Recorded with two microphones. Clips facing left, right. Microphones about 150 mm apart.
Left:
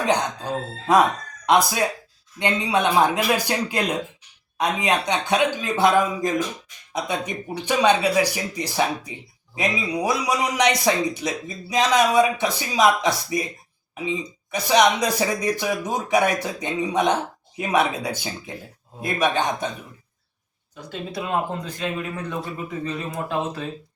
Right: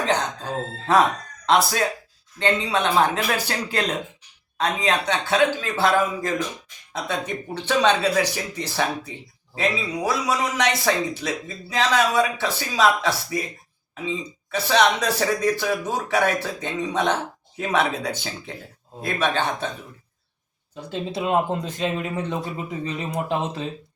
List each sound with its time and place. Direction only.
0.9 s a man's voice: 15° left (ahead or behind)
14.5 s a man's voice: 15° left (ahead or behind)
20.9 s a man's voice: 20° right (ahead or behind)